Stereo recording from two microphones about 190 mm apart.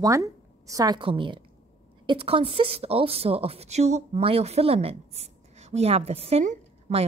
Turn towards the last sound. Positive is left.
turn(degrees=-35)  # may be behind; listen again after turning